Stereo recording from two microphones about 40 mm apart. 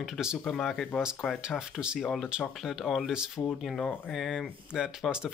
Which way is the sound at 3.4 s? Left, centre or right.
Left.